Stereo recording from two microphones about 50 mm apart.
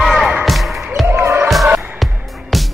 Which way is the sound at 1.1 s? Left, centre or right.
Right.